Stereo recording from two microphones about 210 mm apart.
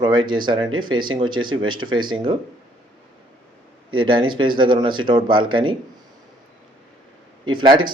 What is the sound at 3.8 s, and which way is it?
Speech, 25° right (ahead or behind).